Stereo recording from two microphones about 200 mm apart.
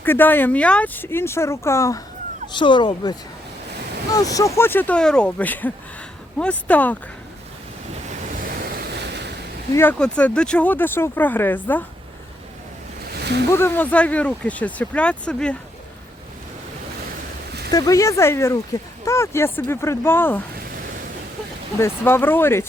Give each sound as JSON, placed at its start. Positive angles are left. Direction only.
{"t": 0.0, "sound": "speech", "side_deg": 10}
{"t": 8.0, "sound": "waves", "side_deg": -35}
{"t": 9.7, "sound": "speech", "side_deg": 10}
{"t": 13.1, "sound": "a sound", "side_deg": -55}
{"t": 13.5, "sound": "speech", "side_deg": 10}
{"t": 17.7, "sound": "speech", "side_deg": 20}
{"t": 21.8, "sound": "speech", "side_deg": 10}